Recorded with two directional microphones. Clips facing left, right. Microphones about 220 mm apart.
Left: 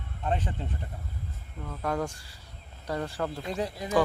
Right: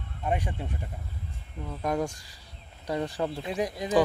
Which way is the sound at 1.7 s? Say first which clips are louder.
Right 2 dB; 15° right (ahead or behind).